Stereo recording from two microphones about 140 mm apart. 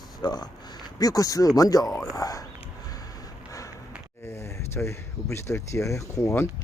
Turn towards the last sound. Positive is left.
turn(degrees=20)  # may be behind; listen again after turning